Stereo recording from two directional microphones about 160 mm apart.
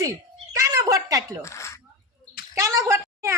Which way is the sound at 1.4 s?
20° left (ahead or behind).